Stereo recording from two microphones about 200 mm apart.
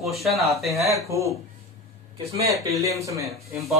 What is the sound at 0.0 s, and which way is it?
Speech, centre (ahead or behind).